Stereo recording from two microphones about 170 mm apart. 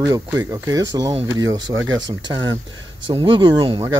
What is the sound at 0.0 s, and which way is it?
Speech, 20° right (ahead or behind).